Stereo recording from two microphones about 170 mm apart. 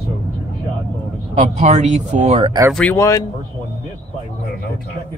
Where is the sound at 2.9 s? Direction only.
20° left (ahead or behind).